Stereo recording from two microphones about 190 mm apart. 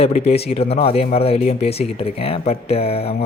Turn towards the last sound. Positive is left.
turn(degrees=30)  # may be behind; listen again after turning